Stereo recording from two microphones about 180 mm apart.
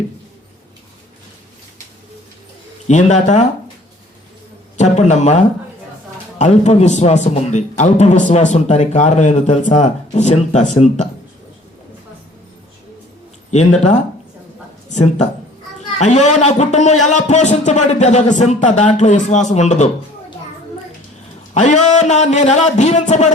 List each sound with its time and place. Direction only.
2.8 s a man's voice: 40° left (ahead or behind)
4.8 s a man's voice: 40° left (ahead or behind)
13.5 s a man's voice: 40° left (ahead or behind)
21.5 s a man's voice: 40° left (ahead or behind)